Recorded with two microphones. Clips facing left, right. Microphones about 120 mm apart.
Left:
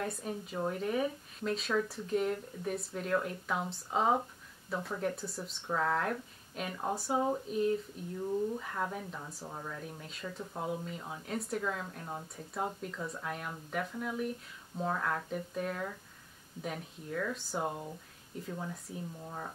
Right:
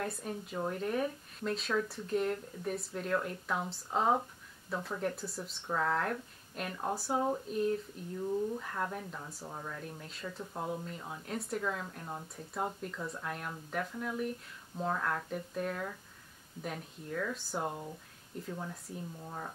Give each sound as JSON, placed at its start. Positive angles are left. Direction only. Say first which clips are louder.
{"t": 0.0, "sound": "speech", "louder": "left 1 dB", "side_deg": 0}